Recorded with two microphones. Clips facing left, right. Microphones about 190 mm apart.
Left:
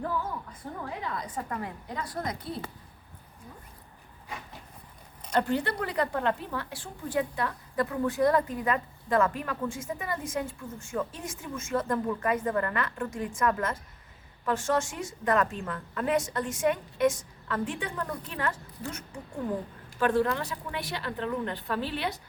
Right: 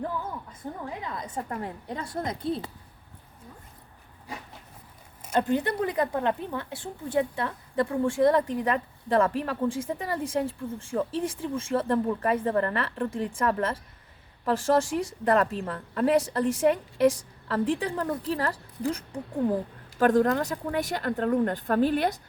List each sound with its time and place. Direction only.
0.6 s a woman's voice: 15° right (ahead or behind)
4.3 s a sound: 35° right (ahead or behind)
5.3 s a woman's voice: 20° right (ahead or behind); by 22.2 s 45° right (ahead or behind)